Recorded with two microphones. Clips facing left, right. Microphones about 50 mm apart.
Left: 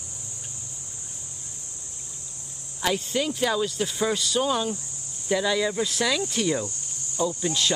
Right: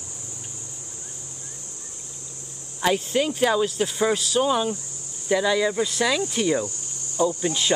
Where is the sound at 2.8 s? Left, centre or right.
Centre.